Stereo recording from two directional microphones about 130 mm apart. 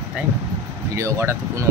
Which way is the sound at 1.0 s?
20° right (ahead or behind).